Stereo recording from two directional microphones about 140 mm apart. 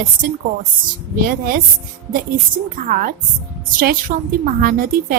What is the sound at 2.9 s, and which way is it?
Speech, 75° right (ahead or behind).